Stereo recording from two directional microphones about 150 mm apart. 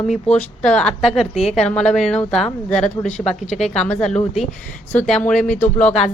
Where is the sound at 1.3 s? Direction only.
45° left (ahead or behind).